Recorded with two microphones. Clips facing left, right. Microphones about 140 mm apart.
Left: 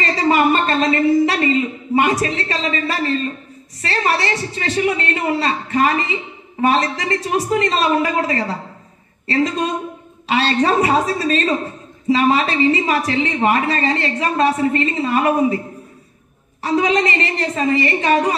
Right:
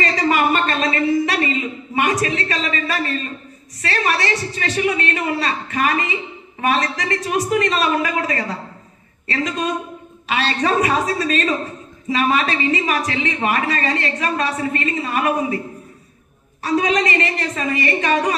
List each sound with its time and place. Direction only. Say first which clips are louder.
0.0 s a sound: left 2 dB; 30° left (ahead or behind)
2.0 s a woman's voice: left 2 dB; 25° left (ahead or behind)
16.6 s a woman's voice: left 1 dB; 25° left (ahead or behind)